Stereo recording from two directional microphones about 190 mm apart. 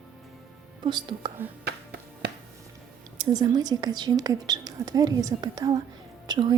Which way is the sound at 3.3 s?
20° right (ahead or behind).